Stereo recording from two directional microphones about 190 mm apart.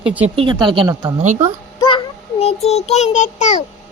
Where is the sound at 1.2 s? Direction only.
35° right (ahead or behind).